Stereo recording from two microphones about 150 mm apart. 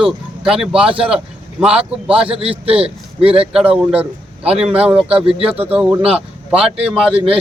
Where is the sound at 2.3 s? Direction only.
40° right (ahead or behind).